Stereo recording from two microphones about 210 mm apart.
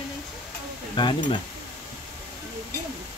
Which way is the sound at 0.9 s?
20° left (ahead or behind).